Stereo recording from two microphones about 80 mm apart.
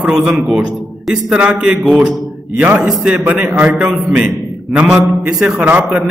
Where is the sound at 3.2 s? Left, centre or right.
Right.